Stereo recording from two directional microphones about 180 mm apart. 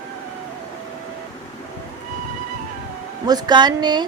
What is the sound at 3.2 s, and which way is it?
Speech, 20° right (ahead or behind).